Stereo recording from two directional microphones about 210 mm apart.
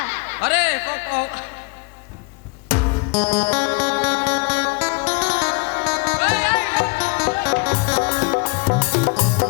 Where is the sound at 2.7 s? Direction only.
30° left (ahead or behind).